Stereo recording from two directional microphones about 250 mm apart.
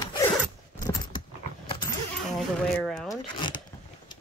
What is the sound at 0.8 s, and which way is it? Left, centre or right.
Mechanisms, centre.